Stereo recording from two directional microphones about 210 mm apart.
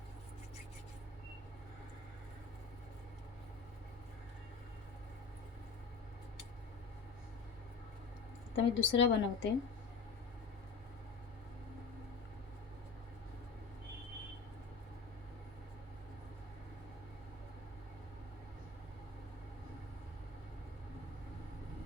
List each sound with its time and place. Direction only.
8.5 s speech: 60° left (ahead or behind)